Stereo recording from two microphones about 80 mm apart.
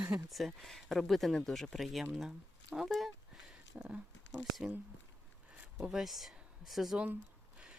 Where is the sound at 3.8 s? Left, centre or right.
Centre.